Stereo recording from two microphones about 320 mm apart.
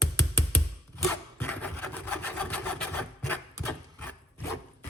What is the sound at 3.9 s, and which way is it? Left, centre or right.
Rub, centre.